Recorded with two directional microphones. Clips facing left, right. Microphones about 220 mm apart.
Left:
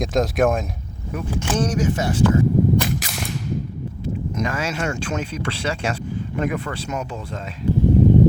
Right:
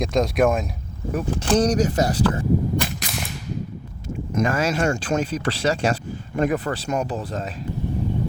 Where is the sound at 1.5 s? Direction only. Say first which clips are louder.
Right 3 dB; 40° right (ahead or behind).